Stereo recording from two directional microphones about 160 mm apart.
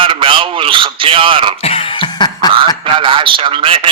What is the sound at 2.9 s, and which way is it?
Speech, 30° right (ahead or behind).